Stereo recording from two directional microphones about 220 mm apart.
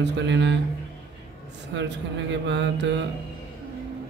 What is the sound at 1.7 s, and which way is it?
A man's voice, 55° right (ahead or behind).